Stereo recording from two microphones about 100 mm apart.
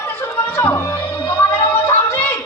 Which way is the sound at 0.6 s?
25° left (ahead or behind).